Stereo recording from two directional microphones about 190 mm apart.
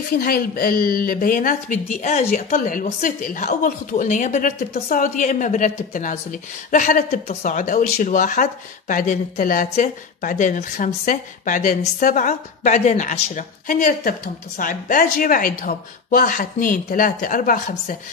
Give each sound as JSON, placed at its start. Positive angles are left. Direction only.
{"t": 0.1, "sound": "speech", "side_deg": 50}